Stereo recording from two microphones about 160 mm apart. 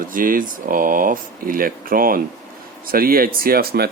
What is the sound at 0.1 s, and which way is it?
Speech, 60° right (ahead or behind).